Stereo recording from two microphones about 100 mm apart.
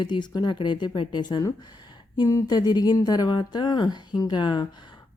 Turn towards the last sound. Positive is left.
turn(degrees=50)  # may be behind; listen again after turning